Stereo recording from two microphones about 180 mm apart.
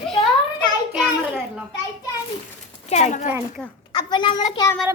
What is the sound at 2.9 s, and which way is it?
Speech, 40° left (ahead or behind).